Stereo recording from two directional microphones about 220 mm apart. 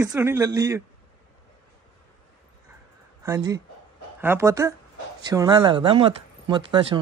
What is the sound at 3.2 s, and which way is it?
Speech, 15° right (ahead or behind).